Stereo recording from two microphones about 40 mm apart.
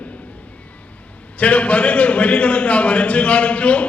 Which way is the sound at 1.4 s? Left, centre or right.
Left.